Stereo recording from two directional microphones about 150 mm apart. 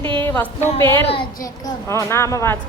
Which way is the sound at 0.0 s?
35° right (ahead or behind).